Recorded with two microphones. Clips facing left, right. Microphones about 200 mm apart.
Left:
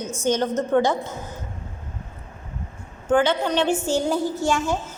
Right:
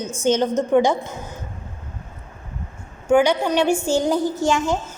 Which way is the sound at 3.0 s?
10° right (ahead or behind).